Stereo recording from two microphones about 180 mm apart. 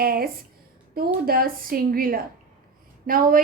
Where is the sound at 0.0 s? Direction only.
55° right (ahead or behind).